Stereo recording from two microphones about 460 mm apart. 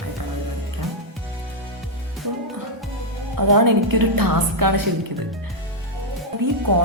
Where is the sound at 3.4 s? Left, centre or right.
Right.